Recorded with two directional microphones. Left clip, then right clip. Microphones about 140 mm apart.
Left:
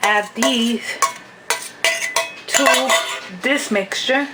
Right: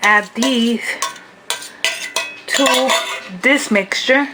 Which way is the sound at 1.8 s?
20° right (ahead or behind).